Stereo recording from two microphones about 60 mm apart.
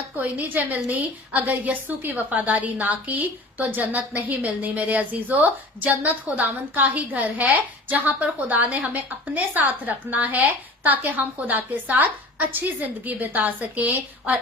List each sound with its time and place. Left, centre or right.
0.2 s a woman's voice: right